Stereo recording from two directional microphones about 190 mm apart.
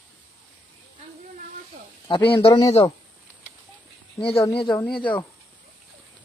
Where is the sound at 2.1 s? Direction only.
25° left (ahead or behind).